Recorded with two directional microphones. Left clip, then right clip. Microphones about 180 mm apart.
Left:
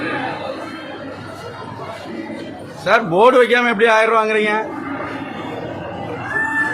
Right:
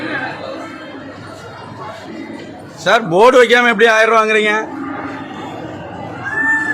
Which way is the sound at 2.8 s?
30° right (ahead or behind).